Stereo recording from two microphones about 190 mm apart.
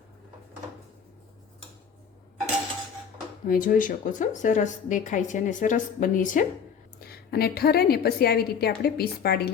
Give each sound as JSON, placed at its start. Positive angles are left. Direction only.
{"t": 3.4, "sound": "a woman's voice", "side_deg": 45}
{"t": 7.0, "sound": "a woman's voice", "side_deg": 55}